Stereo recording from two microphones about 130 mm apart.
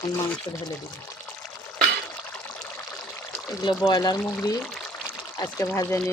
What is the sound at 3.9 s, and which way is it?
Speech, 30° left (ahead or behind).